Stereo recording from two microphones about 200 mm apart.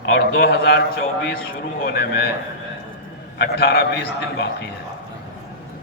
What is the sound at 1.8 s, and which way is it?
Speech, 55° left (ahead or behind).